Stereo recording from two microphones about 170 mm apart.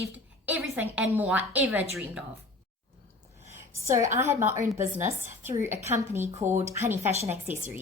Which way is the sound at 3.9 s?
15° right (ahead or behind).